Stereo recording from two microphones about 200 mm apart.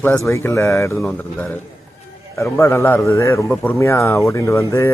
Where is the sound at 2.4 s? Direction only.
15° left (ahead or behind).